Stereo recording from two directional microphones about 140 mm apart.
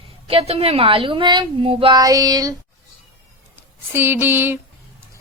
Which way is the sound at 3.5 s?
15° right (ahead or behind).